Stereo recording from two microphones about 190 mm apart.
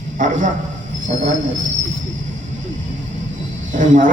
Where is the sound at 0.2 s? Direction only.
45° right (ahead or behind).